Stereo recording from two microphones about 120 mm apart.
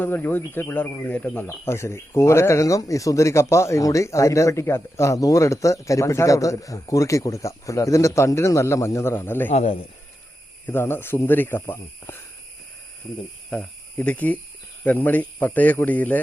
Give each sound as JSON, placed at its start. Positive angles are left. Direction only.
{"t": 0.0, "sound": "speech", "side_deg": 15}
{"t": 10.7, "sound": "speech", "side_deg": 20}
{"t": 13.5, "sound": "a man's voice", "side_deg": 10}